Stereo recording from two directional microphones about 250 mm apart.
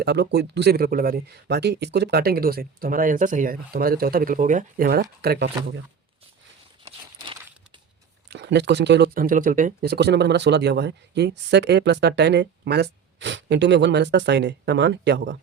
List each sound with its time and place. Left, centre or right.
0.0 s speech: right
8.3 s speech: right